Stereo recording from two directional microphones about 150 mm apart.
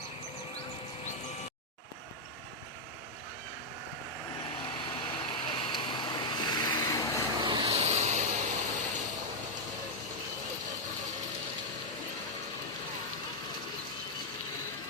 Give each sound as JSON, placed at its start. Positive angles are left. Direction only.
{"t": 4.6, "sound": "vehicle", "side_deg": 35}
{"t": 7.3, "sound": "vehicle", "side_deg": -25}
{"t": 7.7, "sound": "vehicle", "side_deg": -45}